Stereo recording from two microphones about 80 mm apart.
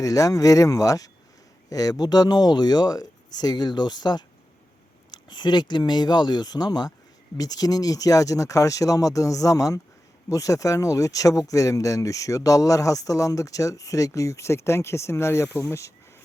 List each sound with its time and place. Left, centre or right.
0.0 s speech: left